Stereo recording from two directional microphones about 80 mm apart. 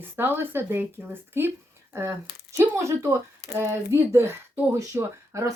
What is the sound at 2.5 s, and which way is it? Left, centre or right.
Speech, right.